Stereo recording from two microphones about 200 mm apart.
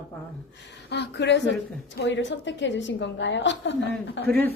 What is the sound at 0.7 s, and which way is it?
A woman's voice, 60° left (ahead or behind).